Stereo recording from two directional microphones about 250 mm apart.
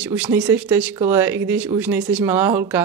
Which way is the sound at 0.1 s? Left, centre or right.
Centre.